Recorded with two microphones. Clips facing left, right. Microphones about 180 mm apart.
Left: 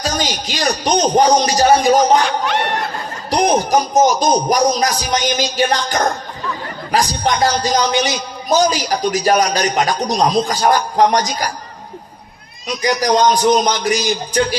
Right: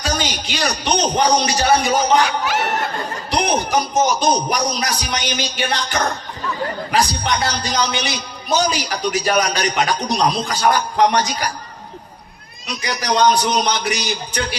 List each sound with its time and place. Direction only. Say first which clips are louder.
0.0 s a man's voice: left 2 dB; 35° left (ahead or behind)
2.4 s speech: left 2 dB; 5° right (ahead or behind)
3.2 s a man's voice: left 5 dB; 40° left (ahead or behind)
12.8 s a man's voice: left 3 dB; 40° left (ahead or behind)